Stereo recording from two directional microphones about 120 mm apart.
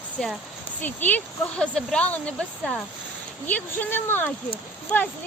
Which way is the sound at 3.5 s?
15° left (ahead or behind).